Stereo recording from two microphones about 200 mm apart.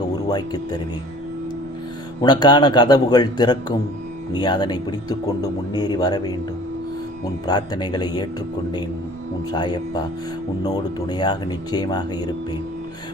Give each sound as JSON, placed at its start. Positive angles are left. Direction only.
{"t": 0.2, "sound": "speech", "side_deg": 20}
{"t": 2.2, "sound": "speech", "side_deg": 20}
{"t": 7.4, "sound": "speech", "side_deg": 20}
{"t": 9.5, "sound": "speech", "side_deg": 20}